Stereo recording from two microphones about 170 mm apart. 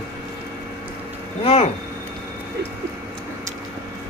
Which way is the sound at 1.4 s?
35° left (ahead or behind).